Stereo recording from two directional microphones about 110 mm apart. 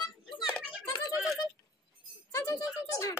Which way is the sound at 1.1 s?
5° right (ahead or behind).